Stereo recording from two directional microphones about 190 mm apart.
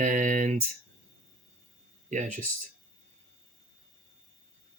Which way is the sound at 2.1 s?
40° right (ahead or behind).